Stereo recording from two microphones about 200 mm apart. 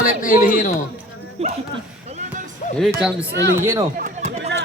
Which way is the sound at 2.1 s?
35° right (ahead or behind).